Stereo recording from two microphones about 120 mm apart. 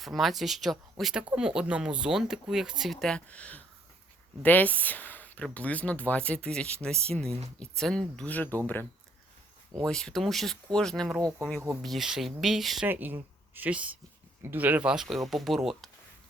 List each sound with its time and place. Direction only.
0.0 s speech: centre (ahead or behind)
12.9 s speech: 15° right (ahead or behind); by 15.9 s centre (ahead or behind)